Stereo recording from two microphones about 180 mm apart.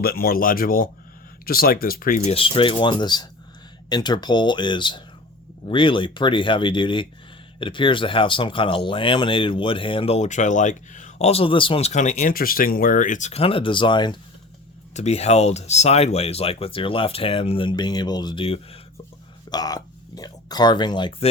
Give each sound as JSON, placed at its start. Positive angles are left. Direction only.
{"t": 0.0, "sound": "speech", "side_deg": 55}
{"t": 2.3, "sound": "speech", "side_deg": 30}
{"t": 14.9, "sound": "speech", "side_deg": 35}
{"t": 19.5, "sound": "speech", "side_deg": 20}